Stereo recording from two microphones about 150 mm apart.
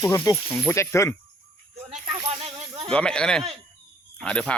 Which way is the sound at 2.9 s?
5° left (ahead or behind).